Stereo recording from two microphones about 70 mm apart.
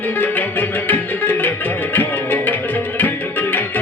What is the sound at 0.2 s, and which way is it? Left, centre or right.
Music, left.